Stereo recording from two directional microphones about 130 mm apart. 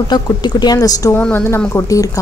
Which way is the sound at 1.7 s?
25° left (ahead or behind).